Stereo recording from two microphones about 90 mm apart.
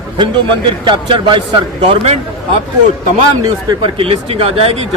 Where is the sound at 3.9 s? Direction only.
90° right.